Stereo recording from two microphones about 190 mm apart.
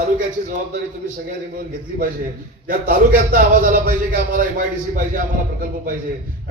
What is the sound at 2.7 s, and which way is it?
A man's voice, 50° right (ahead or behind).